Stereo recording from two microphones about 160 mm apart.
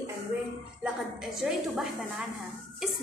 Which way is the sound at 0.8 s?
5° right (ahead or behind).